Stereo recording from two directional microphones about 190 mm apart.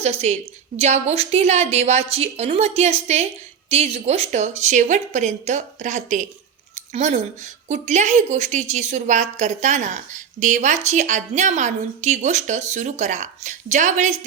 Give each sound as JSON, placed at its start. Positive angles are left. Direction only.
{"t": 0.0, "sound": "a woman's voice", "side_deg": -35}